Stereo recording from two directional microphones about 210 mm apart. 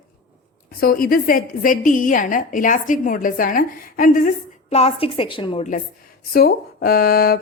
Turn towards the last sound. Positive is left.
turn(degrees=45)  # may be behind; listen again after turning